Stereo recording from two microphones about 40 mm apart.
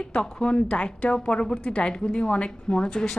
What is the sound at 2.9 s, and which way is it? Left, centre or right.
Speech, centre.